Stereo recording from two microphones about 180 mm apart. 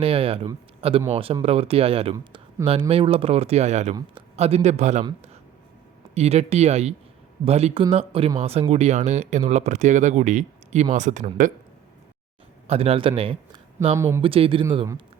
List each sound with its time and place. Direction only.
0.0 s speech: 30° right (ahead or behind)
2.1 s speech: 15° right (ahead or behind)
2.9 s speech: 30° right (ahead or behind)
6.1 s speech: 35° right (ahead or behind)
12.6 s a man's voice: 35° right (ahead or behind)
13.9 s speech: 15° right (ahead or behind)
14.2 s speech: 30° right (ahead or behind)